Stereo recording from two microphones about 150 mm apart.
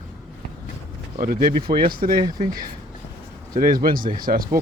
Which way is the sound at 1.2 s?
70° right (ahead or behind).